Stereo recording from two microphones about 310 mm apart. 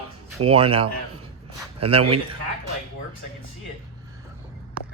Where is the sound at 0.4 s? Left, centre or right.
Centre.